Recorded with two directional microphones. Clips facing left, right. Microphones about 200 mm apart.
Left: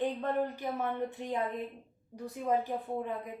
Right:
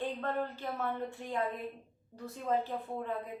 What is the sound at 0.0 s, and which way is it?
A woman's voice, 15° left (ahead or behind).